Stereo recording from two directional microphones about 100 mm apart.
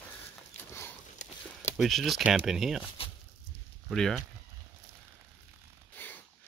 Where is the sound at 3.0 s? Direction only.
70° left (ahead or behind).